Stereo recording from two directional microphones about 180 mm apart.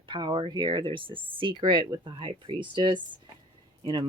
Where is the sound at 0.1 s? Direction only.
25° right (ahead or behind).